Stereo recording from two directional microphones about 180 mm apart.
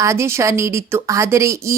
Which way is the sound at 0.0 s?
15° right (ahead or behind).